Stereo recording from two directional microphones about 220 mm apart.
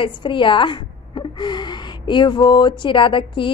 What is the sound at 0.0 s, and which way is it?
A woman's voice, 20° left (ahead or behind).